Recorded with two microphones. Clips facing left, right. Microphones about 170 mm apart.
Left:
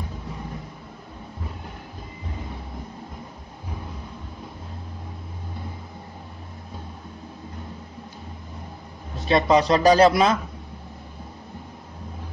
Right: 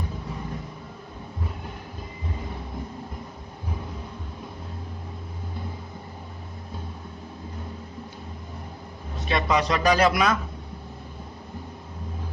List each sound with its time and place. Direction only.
9.3 s a man's voice: 30° left (ahead or behind)